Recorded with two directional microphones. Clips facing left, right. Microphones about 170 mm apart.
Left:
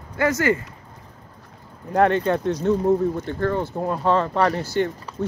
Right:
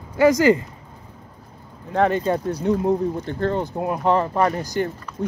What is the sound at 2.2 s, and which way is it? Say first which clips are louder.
Speech: left 1 dB; 10° right (ahead or behind).